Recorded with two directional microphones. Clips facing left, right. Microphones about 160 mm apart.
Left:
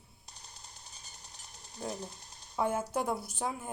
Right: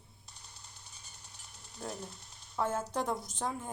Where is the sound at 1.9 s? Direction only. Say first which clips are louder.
Left 2 dB; 40° left (ahead or behind).